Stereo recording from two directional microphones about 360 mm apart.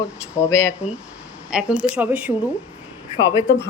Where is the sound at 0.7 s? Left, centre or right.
Centre.